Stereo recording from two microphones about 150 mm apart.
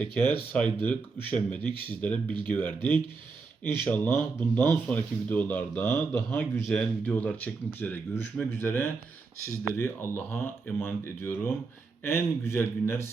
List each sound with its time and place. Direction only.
0.0 s speech: 10° left (ahead or behind)